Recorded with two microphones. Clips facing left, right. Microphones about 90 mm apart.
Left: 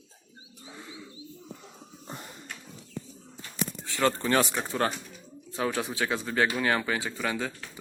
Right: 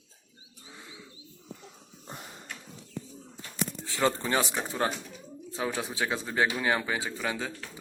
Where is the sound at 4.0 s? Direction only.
10° right (ahead or behind).